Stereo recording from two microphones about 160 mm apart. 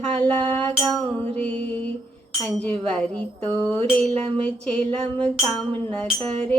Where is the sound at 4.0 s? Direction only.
40° right (ahead or behind).